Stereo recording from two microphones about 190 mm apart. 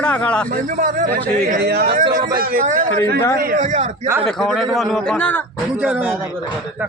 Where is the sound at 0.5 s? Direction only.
45° right (ahead or behind).